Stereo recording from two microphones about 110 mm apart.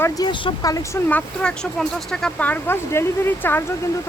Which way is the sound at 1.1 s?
10° left (ahead or behind).